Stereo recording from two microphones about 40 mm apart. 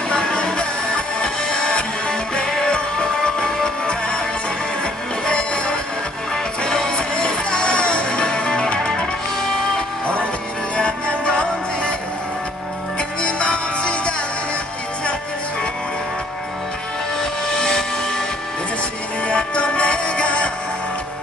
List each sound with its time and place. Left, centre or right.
0.1 s music: left
5.2 s music: left
6.3 s music: centre
10.8 s music: left
13.2 s music: left
19.2 s music: left